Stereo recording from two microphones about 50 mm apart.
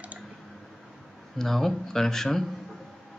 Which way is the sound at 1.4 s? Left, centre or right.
Centre.